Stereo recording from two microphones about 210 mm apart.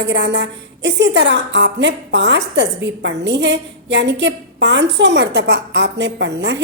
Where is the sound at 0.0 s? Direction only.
55° right (ahead or behind).